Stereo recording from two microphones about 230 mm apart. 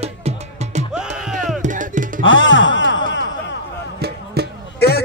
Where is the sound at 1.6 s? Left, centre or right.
Right.